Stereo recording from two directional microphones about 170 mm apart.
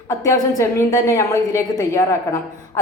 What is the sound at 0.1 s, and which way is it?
A woman's voice, 15° left (ahead or behind).